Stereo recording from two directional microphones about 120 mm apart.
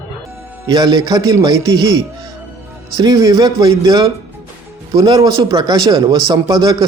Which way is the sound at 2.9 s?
30° right (ahead or behind).